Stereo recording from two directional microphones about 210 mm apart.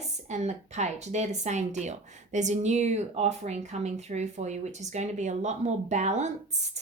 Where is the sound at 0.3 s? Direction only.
35° right (ahead or behind).